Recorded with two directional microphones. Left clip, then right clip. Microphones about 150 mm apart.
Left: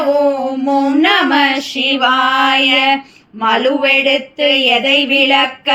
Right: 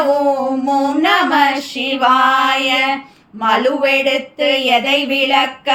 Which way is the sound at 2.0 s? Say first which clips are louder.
Right 2 dB; 15° left (ahead or behind).